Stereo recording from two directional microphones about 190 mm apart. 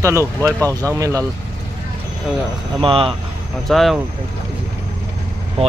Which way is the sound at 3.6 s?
Centre (ahead or behind).